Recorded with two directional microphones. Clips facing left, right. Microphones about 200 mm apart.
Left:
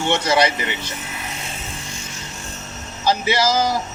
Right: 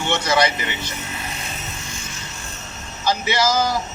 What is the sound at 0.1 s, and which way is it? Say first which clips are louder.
Speech: left 1 dB; 30° left (ahead or behind).